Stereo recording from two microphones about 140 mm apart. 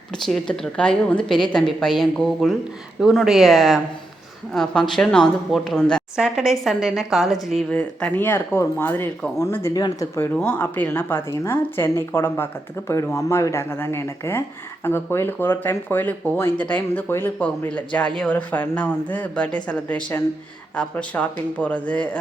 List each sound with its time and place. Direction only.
0.1 s speech: 5° left (ahead or behind); by 10.2 s 25° left (ahead or behind)
10.3 s speech: 15° left (ahead or behind)